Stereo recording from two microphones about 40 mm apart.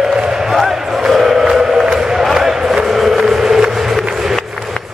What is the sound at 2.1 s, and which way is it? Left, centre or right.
Crowd, centre.